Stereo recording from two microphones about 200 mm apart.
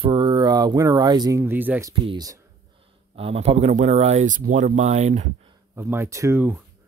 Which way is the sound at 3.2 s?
30° right (ahead or behind).